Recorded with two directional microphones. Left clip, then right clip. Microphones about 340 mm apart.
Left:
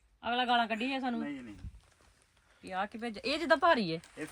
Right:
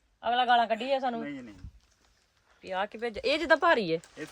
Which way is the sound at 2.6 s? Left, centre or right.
Right.